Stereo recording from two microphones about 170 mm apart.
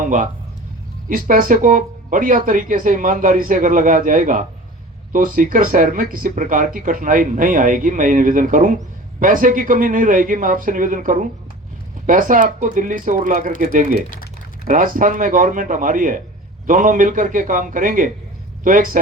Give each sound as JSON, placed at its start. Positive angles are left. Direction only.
{"t": 0.0, "sound": "a man's voice", "side_deg": -50}